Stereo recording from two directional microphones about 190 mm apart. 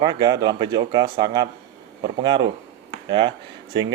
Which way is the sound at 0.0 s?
20° right (ahead or behind).